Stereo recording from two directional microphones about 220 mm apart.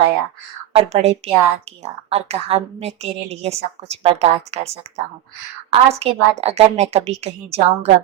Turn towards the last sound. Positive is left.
turn(degrees=-30)  # may be behind; listen again after turning